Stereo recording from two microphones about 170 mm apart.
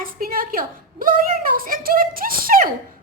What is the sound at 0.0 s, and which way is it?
A woman's voice, 55° right (ahead or behind).